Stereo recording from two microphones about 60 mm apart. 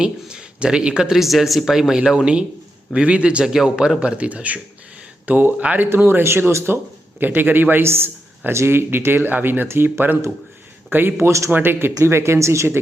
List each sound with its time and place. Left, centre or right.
0.0 s speech: centre
3.4 s speech: centre
4.2 s speech: right
5.9 s a man's voice: right
7.2 s a man's voice: right
11.3 s speech: right
11.5 s a man's voice: right
12.0 s speech: right